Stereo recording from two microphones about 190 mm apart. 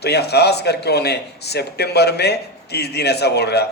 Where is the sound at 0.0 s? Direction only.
60° left (ahead or behind).